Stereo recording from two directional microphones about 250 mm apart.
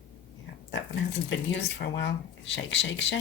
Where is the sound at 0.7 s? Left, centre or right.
Left.